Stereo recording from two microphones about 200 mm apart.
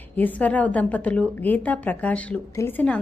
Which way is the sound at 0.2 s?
10° left (ahead or behind).